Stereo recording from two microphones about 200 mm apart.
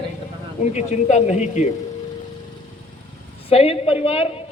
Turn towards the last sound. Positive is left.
turn(degrees=30)  # may be behind; listen again after turning